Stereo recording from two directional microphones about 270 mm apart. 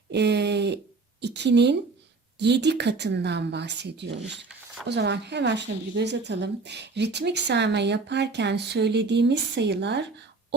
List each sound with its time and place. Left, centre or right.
0.1 s speech: right